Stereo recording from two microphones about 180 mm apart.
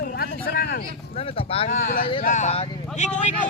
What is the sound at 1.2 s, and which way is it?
Speech, 30° left (ahead or behind).